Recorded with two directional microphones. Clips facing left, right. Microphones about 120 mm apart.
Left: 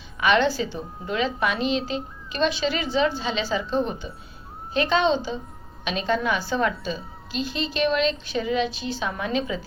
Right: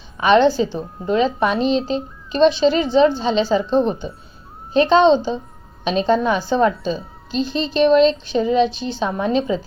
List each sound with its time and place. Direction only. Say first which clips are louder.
0.2 s a woman's voice: right 7 dB; 30° right (ahead or behind)